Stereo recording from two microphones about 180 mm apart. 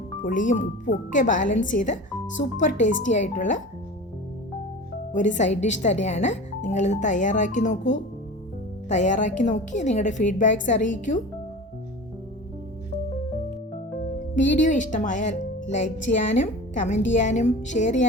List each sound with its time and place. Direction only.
0.2 s speech: 45° left (ahead or behind)
5.1 s speech: 45° left (ahead or behind)
14.3 s speech: 45° left (ahead or behind)
16.1 s a woman's voice: 55° left (ahead or behind)
16.4 s speech: 40° left (ahead or behind)